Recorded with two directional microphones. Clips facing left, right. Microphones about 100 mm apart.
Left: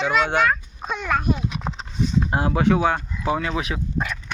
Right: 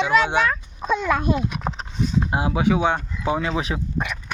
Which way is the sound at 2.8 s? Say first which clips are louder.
Even; 20° right (ahead or behind).